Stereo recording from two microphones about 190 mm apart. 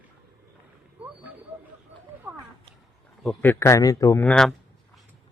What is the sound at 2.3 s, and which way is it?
Cat, 15° right (ahead or behind).